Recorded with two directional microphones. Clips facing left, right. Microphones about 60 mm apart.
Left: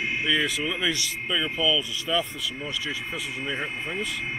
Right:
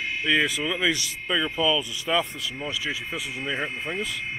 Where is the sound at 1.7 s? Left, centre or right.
Right.